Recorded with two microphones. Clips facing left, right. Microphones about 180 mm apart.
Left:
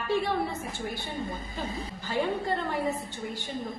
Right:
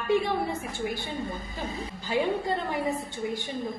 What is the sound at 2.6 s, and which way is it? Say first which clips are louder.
Speech: right 1 dB; 15° right (ahead or behind).